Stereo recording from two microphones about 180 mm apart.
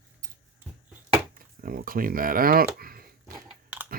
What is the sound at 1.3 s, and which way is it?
Speech, 55° right (ahead or behind).